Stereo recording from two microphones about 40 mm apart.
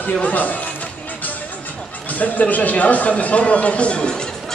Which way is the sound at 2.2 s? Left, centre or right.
Left.